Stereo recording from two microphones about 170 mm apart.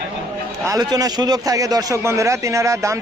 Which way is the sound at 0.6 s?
20° right (ahead or behind).